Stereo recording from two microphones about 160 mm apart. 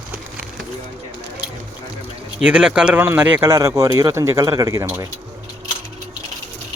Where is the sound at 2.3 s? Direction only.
5° right (ahead or behind).